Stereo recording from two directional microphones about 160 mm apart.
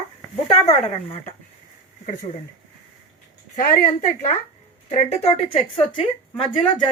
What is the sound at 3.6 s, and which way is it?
A woman's voice, 60° left (ahead or behind).